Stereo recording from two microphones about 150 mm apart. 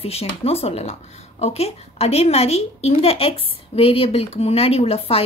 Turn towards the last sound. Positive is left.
turn(degrees=40)  # may be behind; listen again after turning